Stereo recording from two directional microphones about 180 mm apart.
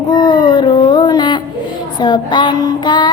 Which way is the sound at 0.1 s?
25° left (ahead or behind).